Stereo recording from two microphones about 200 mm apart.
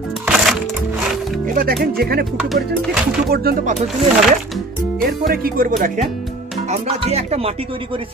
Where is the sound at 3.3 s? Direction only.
50° right (ahead or behind).